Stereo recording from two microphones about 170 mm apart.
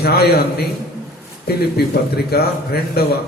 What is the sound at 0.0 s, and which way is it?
Speech, 70° left (ahead or behind).